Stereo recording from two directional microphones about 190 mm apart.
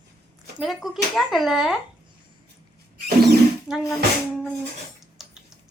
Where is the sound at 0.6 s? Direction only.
Centre (ahead or behind).